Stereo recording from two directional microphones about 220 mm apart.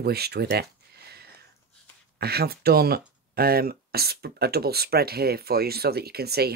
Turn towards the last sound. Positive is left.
turn(degrees=-45)  # may be behind; listen again after turning